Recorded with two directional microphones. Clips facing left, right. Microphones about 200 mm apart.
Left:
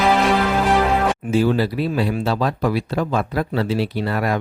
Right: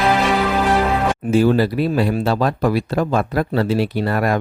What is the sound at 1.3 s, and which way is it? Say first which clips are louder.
Speech: right 4 dB; 50° right (ahead or behind).